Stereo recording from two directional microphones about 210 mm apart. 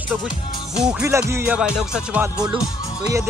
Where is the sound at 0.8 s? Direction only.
5° right (ahead or behind).